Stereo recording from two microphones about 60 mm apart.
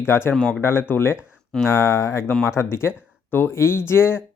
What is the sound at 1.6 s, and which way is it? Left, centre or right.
Speech, left.